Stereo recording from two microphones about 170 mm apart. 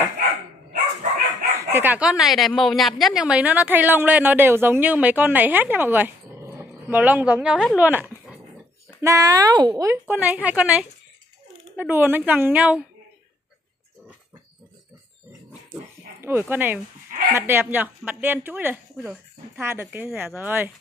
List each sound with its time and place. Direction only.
1.6 s a woman's voice: 15° right (ahead or behind)
7.8 s dog: 10° right (ahead or behind)
9.0 s a woman's voice: 20° right (ahead or behind)
15.7 s dog: 15° right (ahead or behind)
17.3 s a woman's voice: 15° right (ahead or behind)